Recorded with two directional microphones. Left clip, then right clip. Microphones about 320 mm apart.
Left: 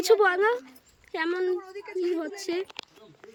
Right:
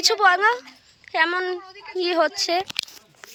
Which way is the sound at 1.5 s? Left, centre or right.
Centre.